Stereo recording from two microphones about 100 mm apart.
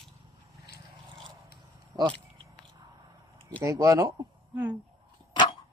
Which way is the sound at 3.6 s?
35° right (ahead or behind).